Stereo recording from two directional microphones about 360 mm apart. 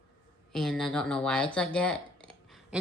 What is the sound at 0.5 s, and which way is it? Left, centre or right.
Speech, centre.